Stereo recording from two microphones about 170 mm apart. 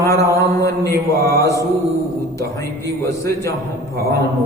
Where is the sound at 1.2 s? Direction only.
20° left (ahead or behind).